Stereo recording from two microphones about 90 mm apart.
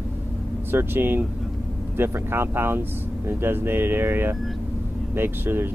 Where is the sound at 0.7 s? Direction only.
25° right (ahead or behind).